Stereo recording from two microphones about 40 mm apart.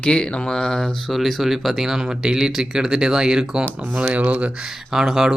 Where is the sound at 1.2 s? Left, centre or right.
Centre.